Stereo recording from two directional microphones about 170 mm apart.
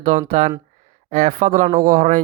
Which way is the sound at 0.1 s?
45° right (ahead or behind).